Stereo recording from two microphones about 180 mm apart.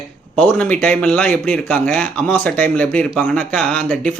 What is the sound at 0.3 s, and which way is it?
Speech, 5° left (ahead or behind).